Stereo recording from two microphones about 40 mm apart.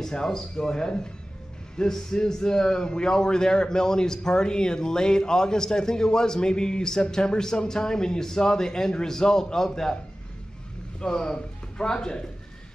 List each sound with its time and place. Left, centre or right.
0.0 s a man's voice: centre
11.0 s speech: centre